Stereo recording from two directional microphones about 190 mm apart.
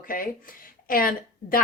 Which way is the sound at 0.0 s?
50° left (ahead or behind).